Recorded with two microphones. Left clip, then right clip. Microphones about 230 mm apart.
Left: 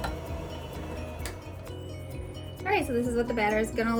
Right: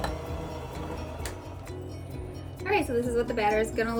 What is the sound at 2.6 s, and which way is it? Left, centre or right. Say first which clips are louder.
A woman's voice: right 1 dB; left.